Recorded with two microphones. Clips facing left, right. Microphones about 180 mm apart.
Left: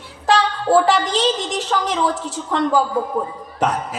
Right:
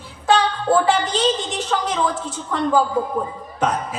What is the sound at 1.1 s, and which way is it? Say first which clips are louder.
A woman's voice: left 1 dB; 35° left (ahead or behind).